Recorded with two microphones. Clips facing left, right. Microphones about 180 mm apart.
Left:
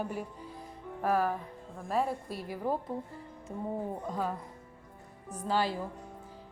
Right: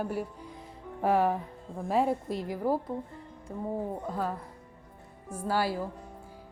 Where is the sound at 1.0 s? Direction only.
25° right (ahead or behind).